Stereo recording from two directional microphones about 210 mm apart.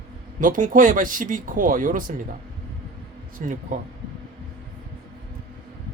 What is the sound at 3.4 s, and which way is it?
Speech, 40° right (ahead or behind).